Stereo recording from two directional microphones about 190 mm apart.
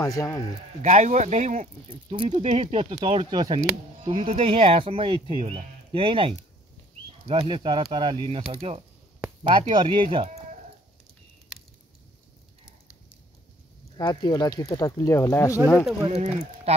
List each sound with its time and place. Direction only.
0.0 s a man's voice: 20° left (ahead or behind)
0.8 s speech: 40° right (ahead or behind)
1.9 s speech: 25° right (ahead or behind)
2.2 s speech: 40° right (ahead or behind)
13.9 s speech: 20° left (ahead or behind)
16.1 s speech: 35° right (ahead or behind)